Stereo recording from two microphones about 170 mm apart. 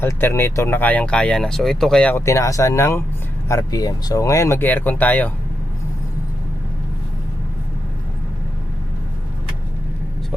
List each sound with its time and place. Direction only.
0.0 s speech: 15° left (ahead or behind)